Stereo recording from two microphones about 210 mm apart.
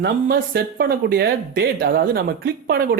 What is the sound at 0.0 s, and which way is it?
Speech, 45° right (ahead or behind).